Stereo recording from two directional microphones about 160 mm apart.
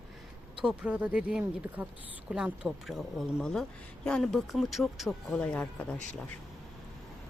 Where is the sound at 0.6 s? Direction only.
10° right (ahead or behind); by 5.8 s 10° left (ahead or behind).